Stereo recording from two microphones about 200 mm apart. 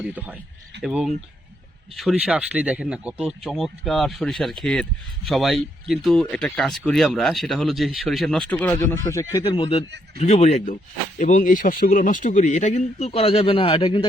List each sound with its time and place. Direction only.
0.0 s speech: 10° right (ahead or behind); by 9.0 s 10° left (ahead or behind)
9.4 s speech: 25° left (ahead or behind)